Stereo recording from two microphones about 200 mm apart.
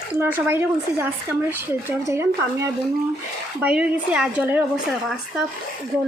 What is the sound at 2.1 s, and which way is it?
A woman's voice, 15° right (ahead or behind).